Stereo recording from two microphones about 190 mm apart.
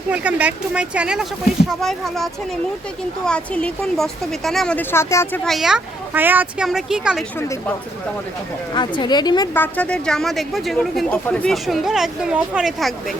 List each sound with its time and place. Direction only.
0.1 s speech: 5° right (ahead or behind); by 5.4 s 15° left (ahead or behind)
5.5 s speech: centre (ahead or behind)
7.3 s speech: 15° left (ahead or behind)
8.7 s a woman's voice: 25° left (ahead or behind)
9.6 s speech: 10° left (ahead or behind)